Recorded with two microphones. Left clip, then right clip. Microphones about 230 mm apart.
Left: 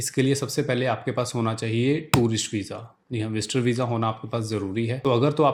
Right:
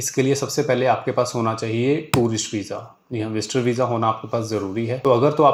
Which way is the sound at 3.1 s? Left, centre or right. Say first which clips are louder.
Right 4 dB; left.